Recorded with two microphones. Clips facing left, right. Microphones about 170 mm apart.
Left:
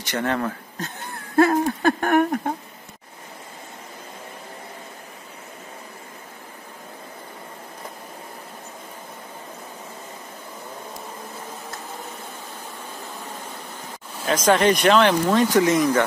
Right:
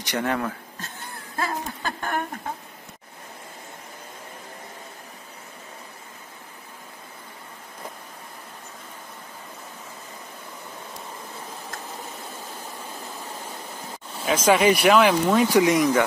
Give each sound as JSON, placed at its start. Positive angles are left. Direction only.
{"t": 0.0, "sound": "speech", "side_deg": -10}
{"t": 1.3, "sound": "speech", "side_deg": 50}
{"t": 14.2, "sound": "speech", "side_deg": -10}